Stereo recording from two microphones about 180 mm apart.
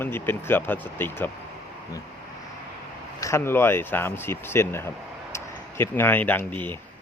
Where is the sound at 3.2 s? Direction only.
15° left (ahead or behind).